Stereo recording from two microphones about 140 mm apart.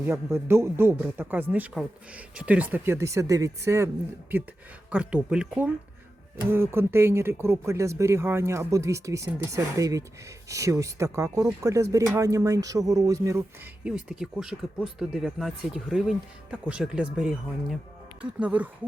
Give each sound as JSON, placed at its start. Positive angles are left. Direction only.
{"t": 0.0, "sound": "speech", "side_deg": -20}
{"t": 4.9, "sound": "speech", "side_deg": -10}
{"t": 13.8, "sound": "speech", "side_deg": -5}